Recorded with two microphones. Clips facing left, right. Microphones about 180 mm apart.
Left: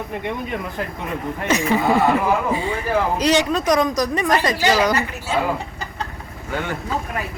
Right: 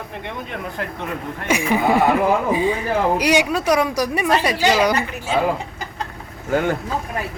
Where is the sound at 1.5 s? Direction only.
10° right (ahead or behind).